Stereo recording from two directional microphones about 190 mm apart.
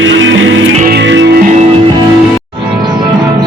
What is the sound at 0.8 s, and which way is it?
Music, 55° right (ahead or behind).